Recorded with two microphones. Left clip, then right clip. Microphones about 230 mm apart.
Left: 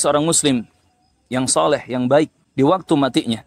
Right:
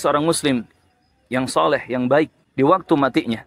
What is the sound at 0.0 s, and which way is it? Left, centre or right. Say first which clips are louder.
Speech: left 1 dB; left.